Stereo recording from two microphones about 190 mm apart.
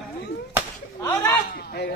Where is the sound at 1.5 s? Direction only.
55° left (ahead or behind).